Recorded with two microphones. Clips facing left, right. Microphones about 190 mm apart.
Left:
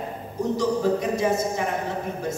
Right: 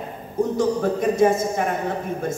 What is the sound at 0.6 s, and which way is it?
A woman's voice, 50° right (ahead or behind).